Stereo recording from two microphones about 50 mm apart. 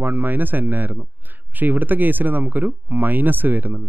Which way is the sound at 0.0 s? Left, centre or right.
Right.